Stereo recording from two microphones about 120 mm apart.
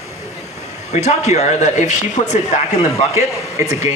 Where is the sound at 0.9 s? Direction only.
70° left (ahead or behind).